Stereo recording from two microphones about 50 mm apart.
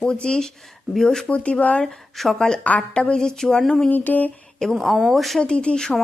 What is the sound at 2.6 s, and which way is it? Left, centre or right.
Speech, left.